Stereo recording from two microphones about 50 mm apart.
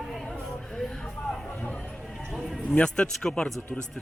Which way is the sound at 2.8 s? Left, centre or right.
Centre.